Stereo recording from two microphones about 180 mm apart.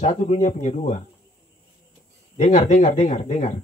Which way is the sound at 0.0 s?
40° left (ahead or behind).